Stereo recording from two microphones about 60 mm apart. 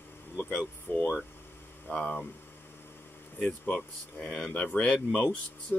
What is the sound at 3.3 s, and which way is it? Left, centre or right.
Speech, left.